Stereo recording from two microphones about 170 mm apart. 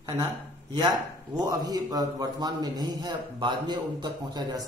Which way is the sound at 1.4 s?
20° right (ahead or behind).